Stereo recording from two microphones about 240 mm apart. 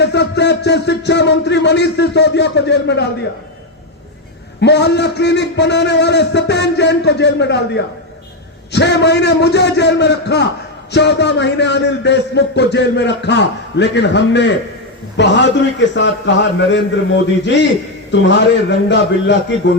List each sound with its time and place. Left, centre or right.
0.0 s a man's voice: left
4.6 s a man's voice: left